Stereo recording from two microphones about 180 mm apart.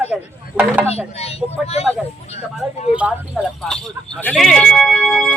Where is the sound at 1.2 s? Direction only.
35° left (ahead or behind).